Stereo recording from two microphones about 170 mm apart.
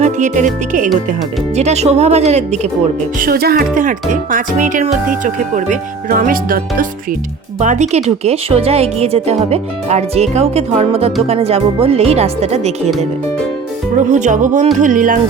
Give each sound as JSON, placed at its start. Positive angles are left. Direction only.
{"t": 0.0, "sound": "speech", "side_deg": -45}
{"t": 3.2, "sound": "speech", "side_deg": -60}
{"t": 7.6, "sound": "speech", "side_deg": -45}
{"t": 13.9, "sound": "speech", "side_deg": -45}